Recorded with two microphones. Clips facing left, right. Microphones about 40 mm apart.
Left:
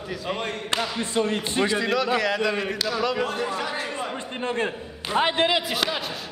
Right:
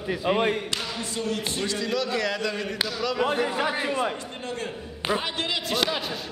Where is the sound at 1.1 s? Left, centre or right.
Left.